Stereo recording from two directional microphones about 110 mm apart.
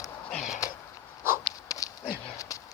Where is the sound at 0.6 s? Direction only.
30° left (ahead or behind).